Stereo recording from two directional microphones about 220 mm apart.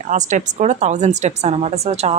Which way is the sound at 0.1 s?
35° right (ahead or behind).